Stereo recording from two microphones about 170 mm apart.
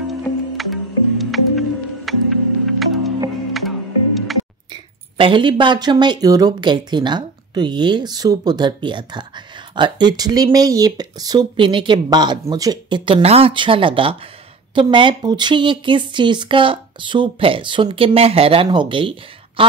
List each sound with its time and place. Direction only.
0.3 s music: 15° left (ahead or behind)
0.6 s music: centre (ahead or behind)
5.1 s speech: 30° right (ahead or behind)